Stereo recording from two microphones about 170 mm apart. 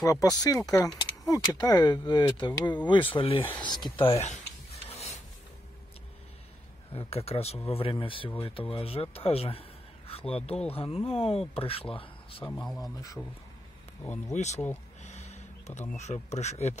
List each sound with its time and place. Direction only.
0.0 s speech: 20° left (ahead or behind); by 4.4 s 35° left (ahead or behind)
4.8 s rub: 40° left (ahead or behind)
6.9 s a man's voice: 35° left (ahead or behind)
12.5 s a man's voice: centre (ahead or behind)
14.3 s speech: 40° left (ahead or behind)
15.0 s snort: 40° left (ahead or behind)
16.0 s speech: 40° left (ahead or behind)